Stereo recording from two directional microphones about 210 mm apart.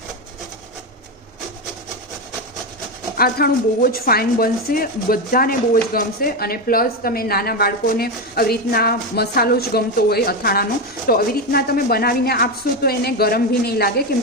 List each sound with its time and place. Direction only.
3.2 s speech: 45° left (ahead or behind)